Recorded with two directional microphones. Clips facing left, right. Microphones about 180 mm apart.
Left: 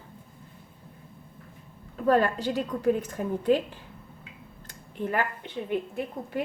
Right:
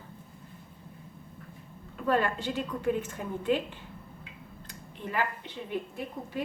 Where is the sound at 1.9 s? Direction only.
40° left (ahead or behind).